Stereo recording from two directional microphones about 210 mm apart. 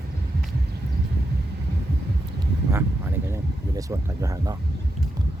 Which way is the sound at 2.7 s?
10° right (ahead or behind).